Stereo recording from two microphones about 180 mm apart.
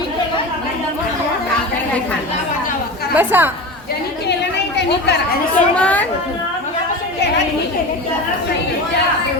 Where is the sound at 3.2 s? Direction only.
10° right (ahead or behind).